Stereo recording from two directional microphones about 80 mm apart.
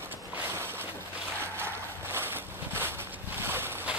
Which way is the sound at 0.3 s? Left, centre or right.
Right.